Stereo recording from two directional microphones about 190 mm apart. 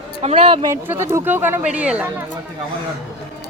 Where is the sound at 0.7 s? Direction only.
15° right (ahead or behind).